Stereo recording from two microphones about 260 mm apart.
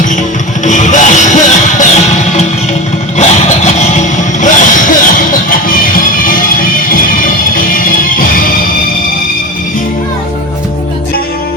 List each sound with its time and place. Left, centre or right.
0.6 s music: left